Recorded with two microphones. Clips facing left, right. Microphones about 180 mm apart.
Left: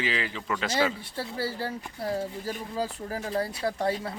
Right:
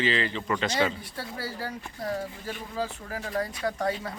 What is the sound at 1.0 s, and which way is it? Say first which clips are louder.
Speech: left 4 dB; 30° left (ahead or behind).